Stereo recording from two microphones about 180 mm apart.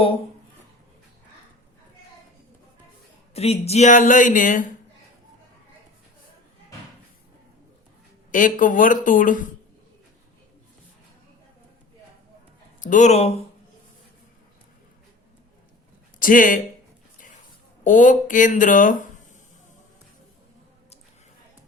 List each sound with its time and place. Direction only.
3.3 s speech: 35° left (ahead or behind)
8.3 s speech: 45° left (ahead or behind)
12.8 s speech: 45° left (ahead or behind)
16.2 s speech: 50° left (ahead or behind)
17.8 s speech: 45° left (ahead or behind)